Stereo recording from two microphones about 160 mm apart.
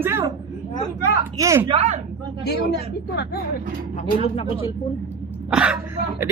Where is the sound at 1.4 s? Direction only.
20° right (ahead or behind).